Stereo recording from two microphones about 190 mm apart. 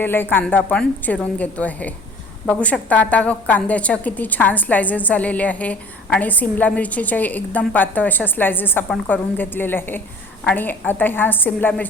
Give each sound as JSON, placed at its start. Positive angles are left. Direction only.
{"t": 0.0, "sound": "a woman's voice", "side_deg": 10}